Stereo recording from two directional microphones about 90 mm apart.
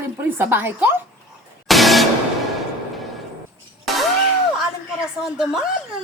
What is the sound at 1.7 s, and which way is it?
Music, centre (ahead or behind).